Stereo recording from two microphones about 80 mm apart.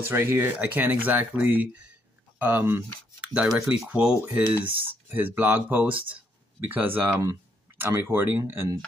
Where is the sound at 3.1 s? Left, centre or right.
Centre; by 8.7 s right.